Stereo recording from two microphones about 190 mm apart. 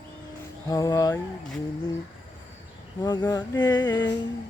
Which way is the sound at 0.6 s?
20° left (ahead or behind).